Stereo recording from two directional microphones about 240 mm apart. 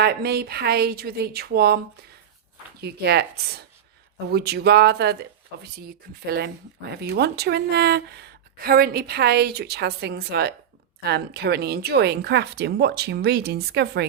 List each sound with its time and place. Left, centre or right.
0.0 s a woman's voice: right
2.8 s a woman's voice: right